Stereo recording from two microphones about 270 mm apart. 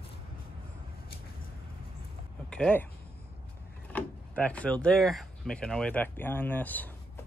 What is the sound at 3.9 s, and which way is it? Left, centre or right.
Speech, centre.